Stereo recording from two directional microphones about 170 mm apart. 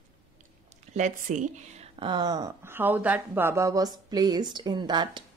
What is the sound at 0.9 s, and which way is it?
Speech, 45° right (ahead or behind).